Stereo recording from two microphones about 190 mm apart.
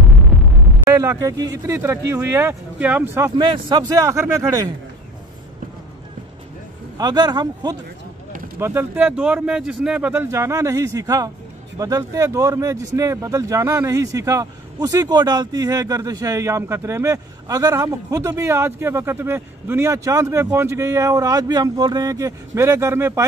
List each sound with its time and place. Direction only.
0.0 s hum: centre (ahead or behind)
0.8 s speech: 15° right (ahead or behind)
7.0 s a man's voice: 20° right (ahead or behind)